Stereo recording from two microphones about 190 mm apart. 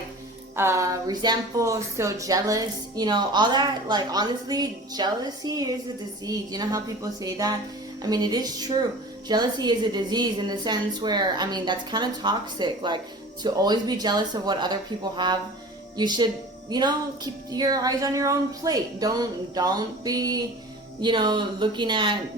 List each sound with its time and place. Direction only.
0.5 s a woman's voice: 15° right (ahead or behind)